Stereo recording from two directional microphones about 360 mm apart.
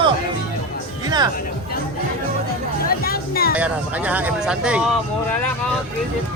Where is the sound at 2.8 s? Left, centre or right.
Left.